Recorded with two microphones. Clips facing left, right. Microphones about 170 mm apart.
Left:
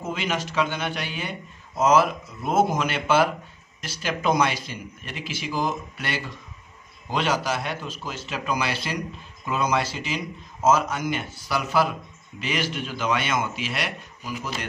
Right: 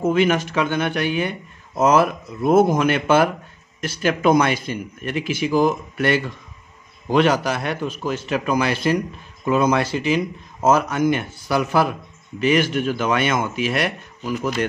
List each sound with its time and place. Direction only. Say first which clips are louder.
0.0 s a man's voice: right 10 dB; 55° right (ahead or behind)